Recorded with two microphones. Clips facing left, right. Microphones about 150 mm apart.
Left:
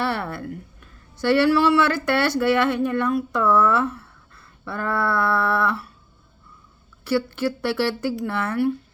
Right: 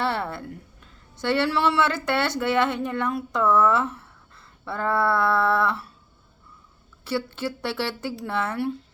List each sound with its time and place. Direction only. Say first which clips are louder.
0.0 s a sound: left 1 dB; 25° right (ahead or behind)
1.2 s speech: left 5 dB; 25° right (ahead or behind)
7.0 s speech: left 5 dB; 25° right (ahead or behind)